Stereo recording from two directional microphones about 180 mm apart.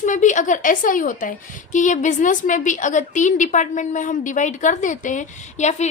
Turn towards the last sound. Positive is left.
turn(degrees=40)  # may be behind; listen again after turning